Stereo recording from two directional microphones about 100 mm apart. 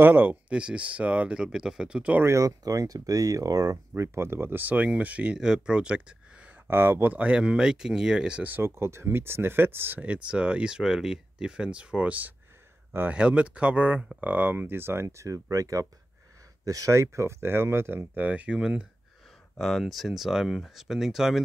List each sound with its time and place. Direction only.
0.0 s speech: 20° right (ahead or behind)
2.2 s speech: 35° right (ahead or behind)
3.7 s speech: 25° right (ahead or behind); by 18.9 s 10° right (ahead or behind)
19.5 s speech: 5° left (ahead or behind)